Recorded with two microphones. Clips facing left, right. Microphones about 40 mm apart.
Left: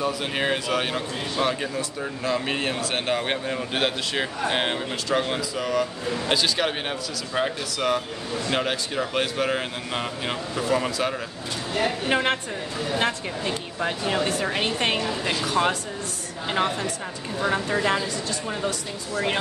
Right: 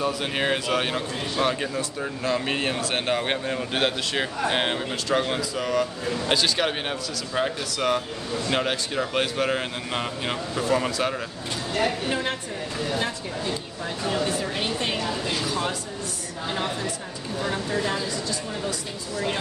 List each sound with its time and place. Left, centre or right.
0.0 s a man's voice: centre
12.1 s speech: left